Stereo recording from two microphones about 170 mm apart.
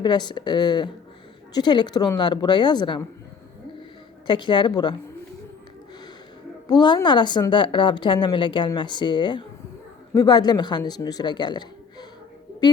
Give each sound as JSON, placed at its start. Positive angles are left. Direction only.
{"t": 0.0, "sound": "a woman's voice", "side_deg": 25}
{"t": 4.3, "sound": "a woman's voice", "side_deg": 30}
{"t": 6.7, "sound": "a woman's voice", "side_deg": 25}